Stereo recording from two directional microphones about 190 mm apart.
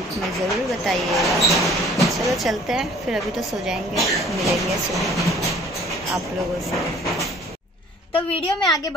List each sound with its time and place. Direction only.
0.5 s a woman's voice: centre (ahead or behind)
8.1 s a woman's voice: 30° left (ahead or behind)